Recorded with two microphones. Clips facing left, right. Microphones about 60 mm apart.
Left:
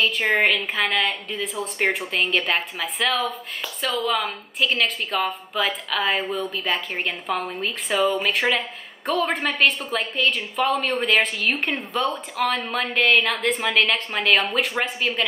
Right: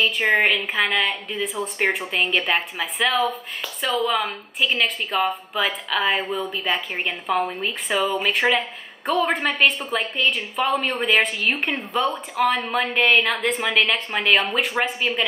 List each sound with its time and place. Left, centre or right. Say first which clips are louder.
0.0 s a woman's voice: right 1 dB; centre
4.6 s a woman's voice: even; centre